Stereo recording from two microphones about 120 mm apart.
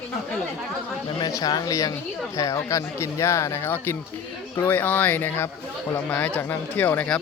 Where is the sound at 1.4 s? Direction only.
30° left (ahead or behind).